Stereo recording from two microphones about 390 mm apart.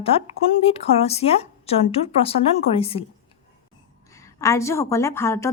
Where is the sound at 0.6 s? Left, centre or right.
Centre.